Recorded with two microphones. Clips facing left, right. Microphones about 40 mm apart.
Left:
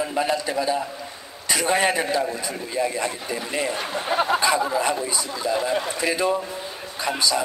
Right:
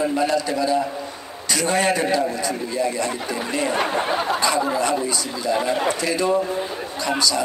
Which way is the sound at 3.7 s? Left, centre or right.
Right.